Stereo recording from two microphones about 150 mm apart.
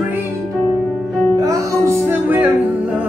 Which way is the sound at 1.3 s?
20° right (ahead or behind).